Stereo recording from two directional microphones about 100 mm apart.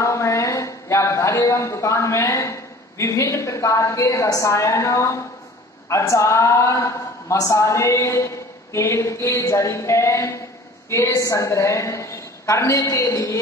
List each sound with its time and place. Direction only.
0.0 s a man's voice: 30° left (ahead or behind)